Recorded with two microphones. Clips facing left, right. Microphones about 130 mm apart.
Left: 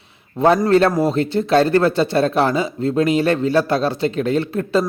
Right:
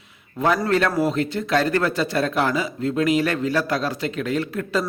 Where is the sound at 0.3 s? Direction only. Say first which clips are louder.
Left 6 dB; 30° left (ahead or behind).